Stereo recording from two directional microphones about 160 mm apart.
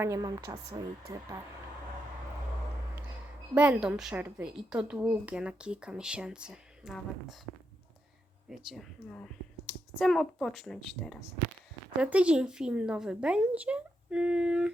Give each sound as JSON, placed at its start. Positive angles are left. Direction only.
{"t": 0.0, "sound": "a woman's voice", "side_deg": -20}
{"t": 3.5, "sound": "a woman's voice", "side_deg": -10}
{"t": 8.4, "sound": "a woman's voice", "side_deg": 0}